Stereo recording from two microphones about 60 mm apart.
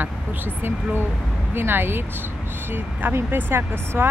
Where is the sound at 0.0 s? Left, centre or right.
Right.